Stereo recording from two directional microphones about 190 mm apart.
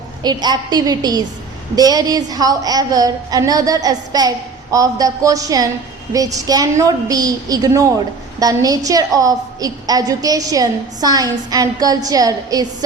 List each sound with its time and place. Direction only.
0.2 s a woman's voice: 20° right (ahead or behind)